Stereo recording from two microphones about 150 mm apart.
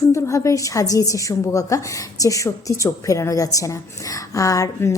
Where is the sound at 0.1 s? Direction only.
20° left (ahead or behind).